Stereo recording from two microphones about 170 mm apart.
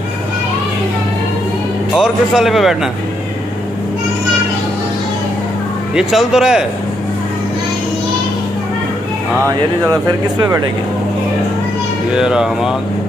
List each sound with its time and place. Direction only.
2.0 s speech: centre (ahead or behind)
5.9 s speech: 5° right (ahead or behind)
10.4 s speech: 20° right (ahead or behind)
12.2 s speech: 5° right (ahead or behind)